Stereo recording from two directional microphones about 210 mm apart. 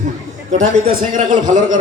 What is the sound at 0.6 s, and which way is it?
A man's voice, 35° right (ahead or behind).